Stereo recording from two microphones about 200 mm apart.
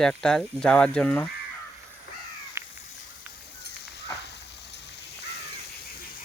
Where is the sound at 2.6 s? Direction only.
15° right (ahead or behind).